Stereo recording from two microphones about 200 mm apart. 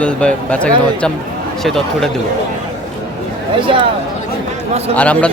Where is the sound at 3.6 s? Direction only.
25° right (ahead or behind).